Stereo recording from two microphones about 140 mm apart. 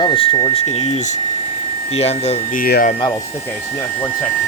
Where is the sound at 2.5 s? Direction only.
85° left.